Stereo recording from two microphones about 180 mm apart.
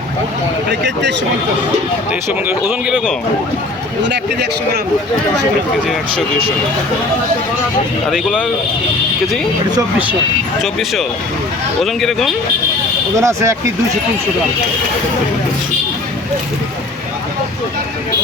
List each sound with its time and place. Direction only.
0.7 s a man's voice: 70° right (ahead or behind)
2.6 s speech: 5° right (ahead or behind)
4.0 s a man's voice: 75° right (ahead or behind)
8.1 s speech: 5° right (ahead or behind)
10.6 s speech: centre (ahead or behind)
13.2 s speech: 15° right (ahead or behind)